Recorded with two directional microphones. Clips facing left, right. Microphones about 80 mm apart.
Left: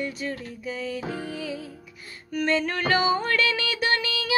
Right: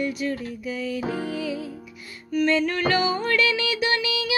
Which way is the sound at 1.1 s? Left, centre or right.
Right.